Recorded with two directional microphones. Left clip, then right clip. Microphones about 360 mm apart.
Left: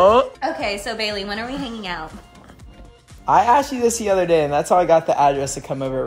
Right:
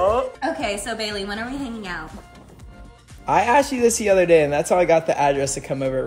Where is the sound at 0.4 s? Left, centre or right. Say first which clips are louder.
Left 1 dB; centre.